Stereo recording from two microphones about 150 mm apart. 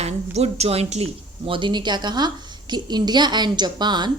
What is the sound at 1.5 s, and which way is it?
A woman's voice, 30° right (ahead or behind).